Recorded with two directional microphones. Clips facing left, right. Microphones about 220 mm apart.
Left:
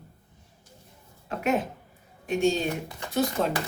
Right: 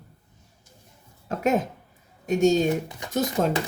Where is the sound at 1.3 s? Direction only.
40° right (ahead or behind).